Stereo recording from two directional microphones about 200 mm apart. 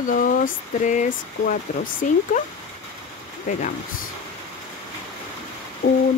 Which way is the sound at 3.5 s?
40° left (ahead or behind).